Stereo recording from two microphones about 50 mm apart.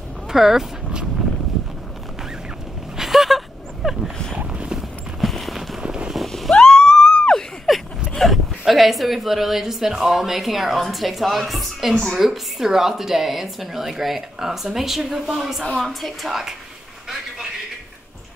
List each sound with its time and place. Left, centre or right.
0.3 s speech: centre
3.0 s dog: centre
4.7 s clip-clop: centre
5.8 s vehicle: centre
6.1 s a sound: centre
6.5 s a sound: centre
7.7 s a sound: centre
8.1 s a woman's voice: centre
15.8 s a woman's voice: centre